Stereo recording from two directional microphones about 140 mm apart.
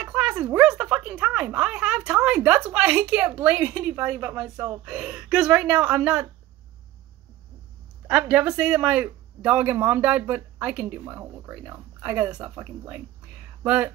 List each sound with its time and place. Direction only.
0.0 s speech: 10° right (ahead or behind)
8.1 s speech: 10° right (ahead or behind)